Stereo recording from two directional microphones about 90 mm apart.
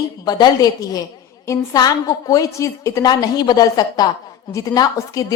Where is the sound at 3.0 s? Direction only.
50° left (ahead or behind).